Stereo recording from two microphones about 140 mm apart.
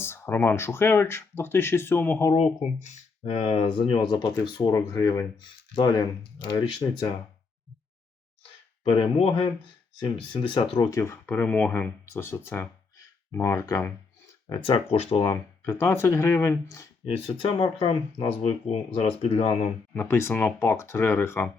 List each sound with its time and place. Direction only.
0.0 s speech: 15° left (ahead or behind)
2.8 s speech: 50° left (ahead or behind); by 7.2 s 35° left (ahead or behind)
8.8 s speech: 40° left (ahead or behind)
10.9 s speech: 20° left (ahead or behind)
14.5 s speech: 30° left (ahead or behind)
14.8 s speech: 45° left (ahead or behind)
15.2 s speech: 20° left (ahead or behind)
17.1 s speech: 40° left (ahead or behind)
19.9 s speech: 10° left (ahead or behind)